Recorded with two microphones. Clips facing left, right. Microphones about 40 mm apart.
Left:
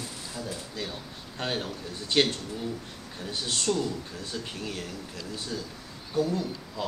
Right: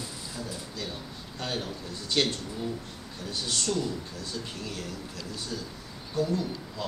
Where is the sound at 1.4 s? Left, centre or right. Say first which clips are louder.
Left 2 dB; left.